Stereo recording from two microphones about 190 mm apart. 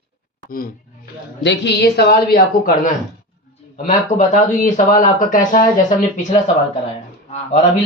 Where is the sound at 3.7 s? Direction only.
40° left (ahead or behind).